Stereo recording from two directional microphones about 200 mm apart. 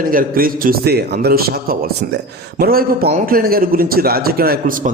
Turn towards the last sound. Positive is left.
turn(degrees=-45)  # may be behind; listen again after turning